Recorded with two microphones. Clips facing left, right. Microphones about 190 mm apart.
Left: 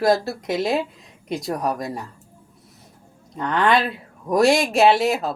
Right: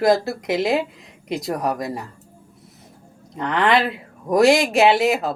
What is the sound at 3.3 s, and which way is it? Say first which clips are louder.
Speech: right 1 dB; 20° right (ahead or behind).